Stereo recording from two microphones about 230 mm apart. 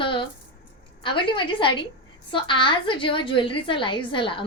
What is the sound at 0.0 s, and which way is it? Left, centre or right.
A woman's voice, left.